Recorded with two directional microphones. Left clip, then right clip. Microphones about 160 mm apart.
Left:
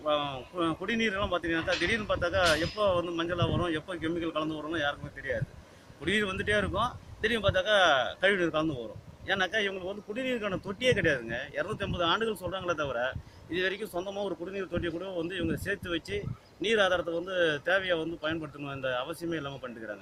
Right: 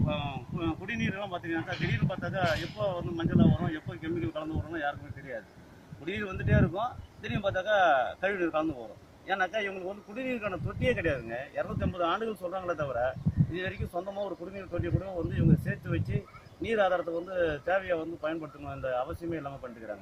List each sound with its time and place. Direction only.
0.1 s speech: 30° left (ahead or behind)
6.1 s speech: 30° left (ahead or behind)